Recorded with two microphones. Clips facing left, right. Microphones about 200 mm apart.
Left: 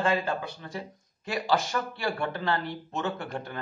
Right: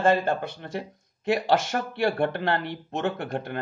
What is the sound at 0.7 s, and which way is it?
Speech, 60° right (ahead or behind).